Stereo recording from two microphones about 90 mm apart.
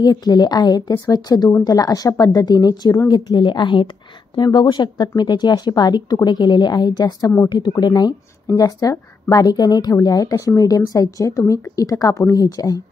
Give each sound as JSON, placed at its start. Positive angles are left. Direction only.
{"t": 0.0, "sound": "a woman's voice", "side_deg": 50}